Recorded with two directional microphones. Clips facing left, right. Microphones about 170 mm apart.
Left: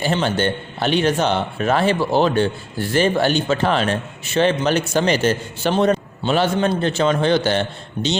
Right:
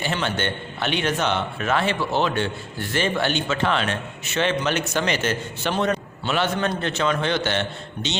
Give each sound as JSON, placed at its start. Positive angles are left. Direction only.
{"t": 0.0, "sound": "a man's voice", "side_deg": 35}